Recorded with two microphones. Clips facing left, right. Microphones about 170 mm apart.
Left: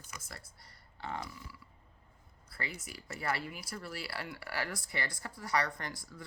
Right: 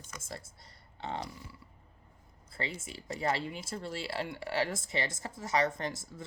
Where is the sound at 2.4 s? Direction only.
25° right (ahead or behind).